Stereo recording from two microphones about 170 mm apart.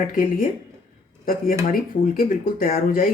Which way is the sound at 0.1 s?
50° left (ahead or behind).